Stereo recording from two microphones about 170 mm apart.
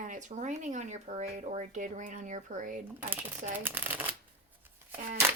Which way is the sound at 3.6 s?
10° right (ahead or behind).